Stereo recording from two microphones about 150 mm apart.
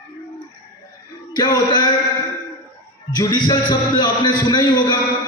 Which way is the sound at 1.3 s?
30° left (ahead or behind).